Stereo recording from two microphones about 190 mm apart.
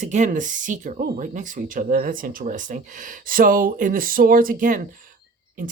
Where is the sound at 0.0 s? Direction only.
40° right (ahead or behind).